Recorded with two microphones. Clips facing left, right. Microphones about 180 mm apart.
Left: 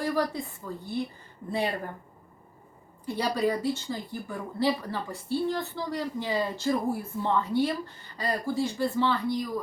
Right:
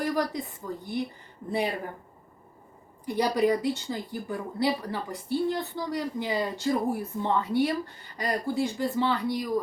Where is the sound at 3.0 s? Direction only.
15° right (ahead or behind).